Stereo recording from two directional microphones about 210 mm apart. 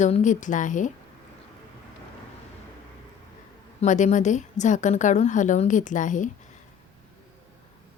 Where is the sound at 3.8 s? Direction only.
35° left (ahead or behind).